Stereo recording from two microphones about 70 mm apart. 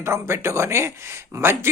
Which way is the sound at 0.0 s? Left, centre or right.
Right.